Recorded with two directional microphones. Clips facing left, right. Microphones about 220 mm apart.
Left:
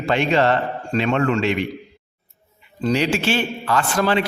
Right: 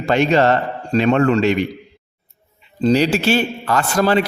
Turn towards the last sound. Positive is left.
turn(degrees=-40)  # may be behind; listen again after turning